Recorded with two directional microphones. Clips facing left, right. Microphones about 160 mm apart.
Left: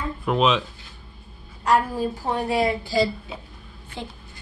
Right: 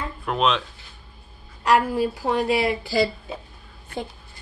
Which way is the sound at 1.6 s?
80° right.